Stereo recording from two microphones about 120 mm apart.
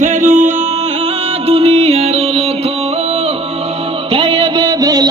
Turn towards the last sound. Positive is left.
turn(degrees=-30)  # may be behind; listen again after turning